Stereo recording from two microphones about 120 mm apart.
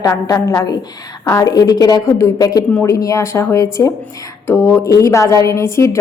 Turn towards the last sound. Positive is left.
turn(degrees=25)  # may be behind; listen again after turning